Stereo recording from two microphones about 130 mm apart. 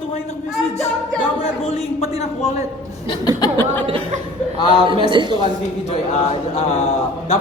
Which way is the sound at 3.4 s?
30° left (ahead or behind).